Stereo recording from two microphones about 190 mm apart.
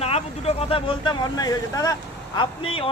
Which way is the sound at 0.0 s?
35° left (ahead or behind).